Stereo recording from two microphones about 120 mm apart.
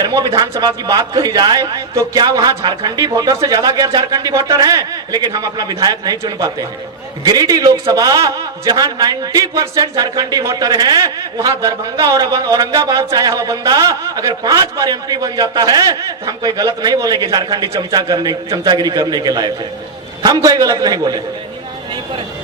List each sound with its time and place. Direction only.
0.0 s a man's voice: 35° right (ahead or behind)